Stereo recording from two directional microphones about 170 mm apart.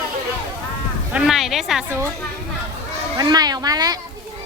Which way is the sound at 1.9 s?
15° right (ahead or behind).